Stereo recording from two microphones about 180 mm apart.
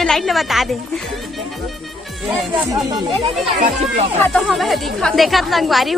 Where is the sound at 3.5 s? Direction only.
35° right (ahead or behind).